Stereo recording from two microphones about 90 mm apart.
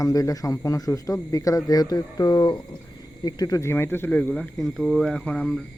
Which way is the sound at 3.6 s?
30° left (ahead or behind).